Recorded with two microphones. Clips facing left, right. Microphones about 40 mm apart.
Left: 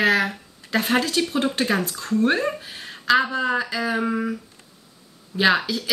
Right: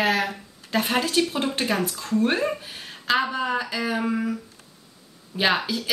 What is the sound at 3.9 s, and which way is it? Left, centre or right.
Speech, centre.